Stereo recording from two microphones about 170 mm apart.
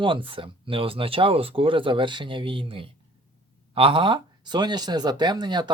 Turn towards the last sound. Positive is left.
turn(degrees=-25)  # may be behind; listen again after turning